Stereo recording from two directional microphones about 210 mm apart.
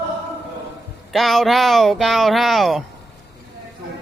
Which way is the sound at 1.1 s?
Centre (ahead or behind).